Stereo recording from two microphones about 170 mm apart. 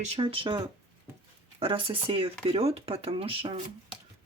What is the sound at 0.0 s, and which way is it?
Speech, 35° right (ahead or behind).